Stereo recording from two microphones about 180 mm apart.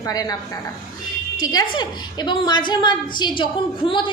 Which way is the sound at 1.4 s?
20° left (ahead or behind).